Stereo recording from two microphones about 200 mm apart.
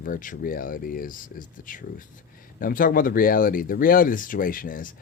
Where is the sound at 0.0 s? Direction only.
40° left (ahead or behind).